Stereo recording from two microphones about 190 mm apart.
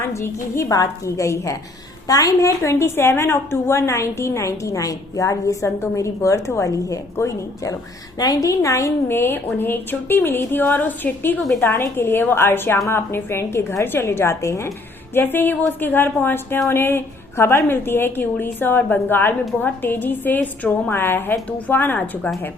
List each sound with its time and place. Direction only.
0.0 s a woman's voice: 15° left (ahead or behind)